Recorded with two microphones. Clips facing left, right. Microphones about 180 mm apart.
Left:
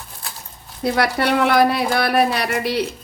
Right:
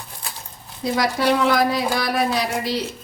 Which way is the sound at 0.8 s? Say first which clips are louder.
Left 1 dB; 65° left (ahead or behind).